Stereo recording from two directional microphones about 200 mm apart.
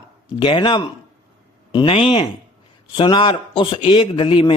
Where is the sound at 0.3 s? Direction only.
25° left (ahead or behind).